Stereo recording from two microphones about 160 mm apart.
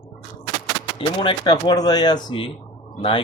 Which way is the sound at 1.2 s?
30° left (ahead or behind).